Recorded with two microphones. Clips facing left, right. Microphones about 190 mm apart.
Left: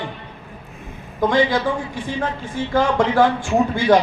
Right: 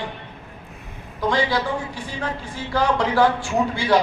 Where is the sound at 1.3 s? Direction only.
50° left (ahead or behind).